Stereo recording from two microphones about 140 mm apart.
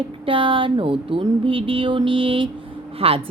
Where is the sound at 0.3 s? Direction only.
40° right (ahead or behind).